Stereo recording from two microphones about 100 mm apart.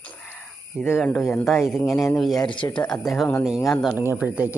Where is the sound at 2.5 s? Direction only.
55° left (ahead or behind).